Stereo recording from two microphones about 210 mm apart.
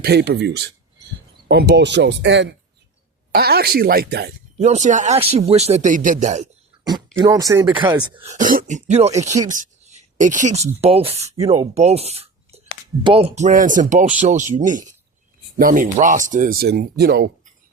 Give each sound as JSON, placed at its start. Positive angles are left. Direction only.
{"t": 0.0, "sound": "speech", "side_deg": -50}
{"t": 4.6, "sound": "a man's voice", "side_deg": -35}
{"t": 6.8, "sound": "speech", "side_deg": -15}
{"t": 8.3, "sound": "a man's voice", "side_deg": -40}
{"t": 9.5, "sound": "a sound", "side_deg": -35}
{"t": 10.8, "sound": "a man's voice", "side_deg": -30}